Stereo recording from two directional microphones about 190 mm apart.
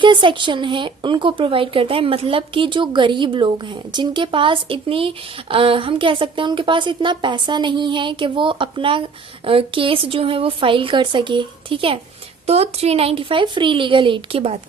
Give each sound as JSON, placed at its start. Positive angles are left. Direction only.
{"t": 0.0, "sound": "speech", "side_deg": -25}